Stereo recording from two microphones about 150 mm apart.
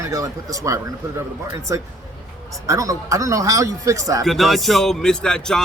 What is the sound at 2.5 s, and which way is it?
Speech, 20° right (ahead or behind).